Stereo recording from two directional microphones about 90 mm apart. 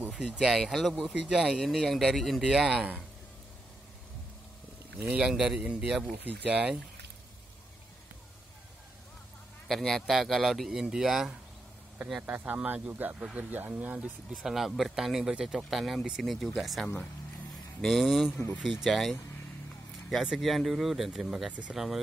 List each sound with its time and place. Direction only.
0.0 s speech: 10° right (ahead or behind)
5.1 s speech: 10° right (ahead or behind)
9.7 s speech: 5° left (ahead or behind)
12.2 s speech: 20° right (ahead or behind)
14.3 s speech: 5° right (ahead or behind)
21.7 s speech: 5° right (ahead or behind)